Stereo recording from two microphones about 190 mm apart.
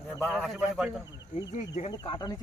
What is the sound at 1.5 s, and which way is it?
Speech, 35° left (ahead or behind).